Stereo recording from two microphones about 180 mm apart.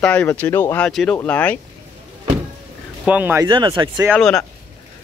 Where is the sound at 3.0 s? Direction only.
10° right (ahead or behind).